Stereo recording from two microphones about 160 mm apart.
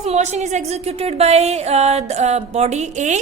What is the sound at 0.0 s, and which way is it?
A woman's voice, 45° right (ahead or behind).